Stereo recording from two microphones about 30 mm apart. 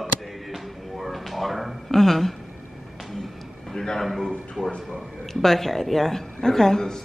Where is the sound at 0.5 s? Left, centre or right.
Centre.